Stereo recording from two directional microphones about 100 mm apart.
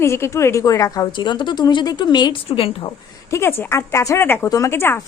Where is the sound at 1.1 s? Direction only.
50° left (ahead or behind).